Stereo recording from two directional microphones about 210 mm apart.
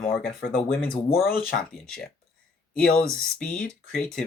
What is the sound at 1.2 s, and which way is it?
Speech, 45° left (ahead or behind).